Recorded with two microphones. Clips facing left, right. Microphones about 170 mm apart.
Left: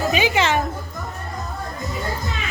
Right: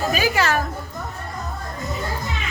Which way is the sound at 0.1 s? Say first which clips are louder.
Left 1 dB; 20° left (ahead or behind).